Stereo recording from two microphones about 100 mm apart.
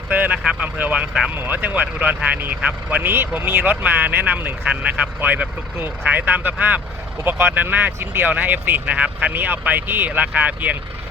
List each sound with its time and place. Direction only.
0.1 s speech: 15° right (ahead or behind)